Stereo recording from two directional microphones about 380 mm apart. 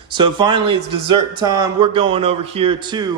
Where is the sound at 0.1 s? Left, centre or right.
Centre.